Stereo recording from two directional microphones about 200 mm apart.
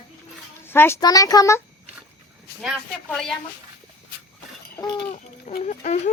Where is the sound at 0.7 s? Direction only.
10° left (ahead or behind).